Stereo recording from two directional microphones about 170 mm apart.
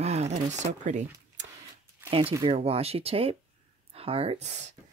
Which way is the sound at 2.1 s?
30° right (ahead or behind).